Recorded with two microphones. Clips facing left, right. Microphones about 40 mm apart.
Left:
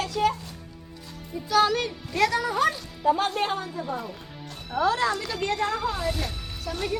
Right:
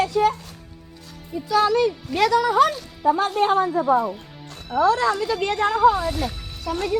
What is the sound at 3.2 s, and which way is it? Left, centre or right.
Speech, centre.